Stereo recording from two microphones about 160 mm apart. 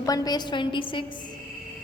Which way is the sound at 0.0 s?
25° left (ahead or behind).